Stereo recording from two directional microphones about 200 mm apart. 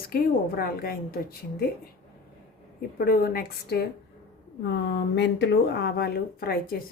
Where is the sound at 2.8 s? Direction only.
45° left (ahead or behind).